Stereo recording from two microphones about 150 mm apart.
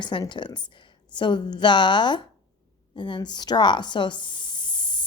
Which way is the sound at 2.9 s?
30° left (ahead or behind).